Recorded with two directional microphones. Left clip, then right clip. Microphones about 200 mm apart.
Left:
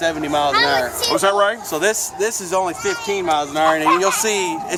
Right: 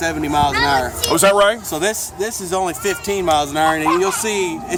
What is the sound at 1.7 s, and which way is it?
Speech, centre (ahead or behind).